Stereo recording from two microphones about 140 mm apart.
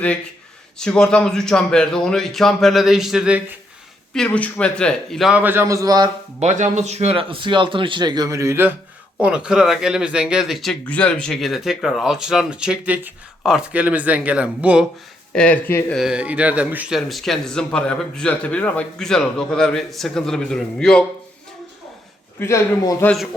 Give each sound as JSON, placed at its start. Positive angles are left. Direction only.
{"t": 0.8, "sound": "speech", "side_deg": 5}
{"t": 4.1, "sound": "speech", "side_deg": 5}
{"t": 5.3, "sound": "a man's voice", "side_deg": -15}
{"t": 6.4, "sound": "speech", "side_deg": -60}
{"t": 9.2, "sound": "speech", "side_deg": -5}
{"t": 15.3, "sound": "speech", "side_deg": 10}
{"t": 16.0, "sound": "speech", "side_deg": -5}
{"t": 17.0, "sound": "speech", "side_deg": 0}
{"t": 22.4, "sound": "a man's voice", "side_deg": 20}